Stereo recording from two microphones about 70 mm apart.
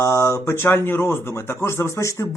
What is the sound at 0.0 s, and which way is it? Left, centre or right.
Speech, left.